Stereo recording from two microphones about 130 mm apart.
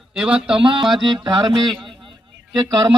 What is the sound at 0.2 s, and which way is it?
Speech, 5° right (ahead or behind).